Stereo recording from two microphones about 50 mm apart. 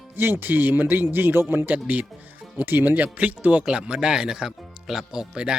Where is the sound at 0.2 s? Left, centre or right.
Right.